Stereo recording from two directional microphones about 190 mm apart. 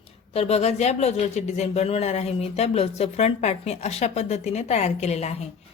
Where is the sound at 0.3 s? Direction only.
35° left (ahead or behind).